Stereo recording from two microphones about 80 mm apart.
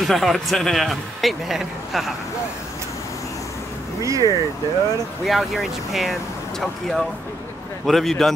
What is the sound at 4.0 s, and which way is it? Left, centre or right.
Speech, right.